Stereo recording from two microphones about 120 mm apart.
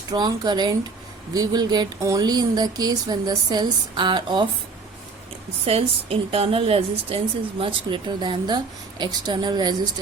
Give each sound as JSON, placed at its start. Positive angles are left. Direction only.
{"t": 0.1, "sound": "speech", "side_deg": -35}
{"t": 5.6, "sound": "a woman's voice", "side_deg": -55}
{"t": 7.6, "sound": "speech", "side_deg": -45}